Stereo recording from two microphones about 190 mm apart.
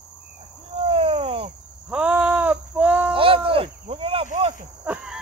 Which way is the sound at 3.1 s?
30° right (ahead or behind).